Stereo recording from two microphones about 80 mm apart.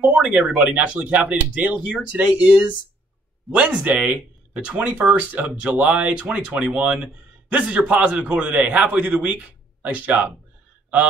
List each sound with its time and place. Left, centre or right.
0.0 s speech: centre